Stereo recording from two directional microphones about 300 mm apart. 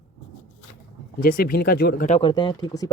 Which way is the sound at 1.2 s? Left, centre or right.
Left.